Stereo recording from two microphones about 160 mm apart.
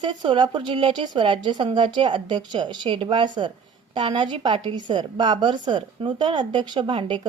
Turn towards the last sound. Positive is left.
turn(degrees=-30)  # may be behind; listen again after turning